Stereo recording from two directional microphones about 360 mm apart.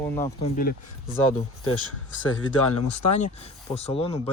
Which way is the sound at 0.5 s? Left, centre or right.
Left.